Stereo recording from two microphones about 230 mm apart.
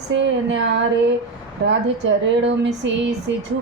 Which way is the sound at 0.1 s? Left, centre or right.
Right.